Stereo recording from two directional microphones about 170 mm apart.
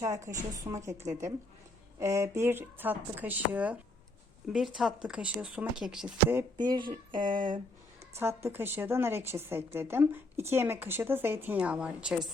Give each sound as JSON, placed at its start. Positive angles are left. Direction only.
{"t": 0.0, "sound": "speech", "side_deg": -15}
{"t": 6.7, "sound": "speech", "side_deg": -25}
{"t": 8.1, "sound": "a woman's voice", "side_deg": -15}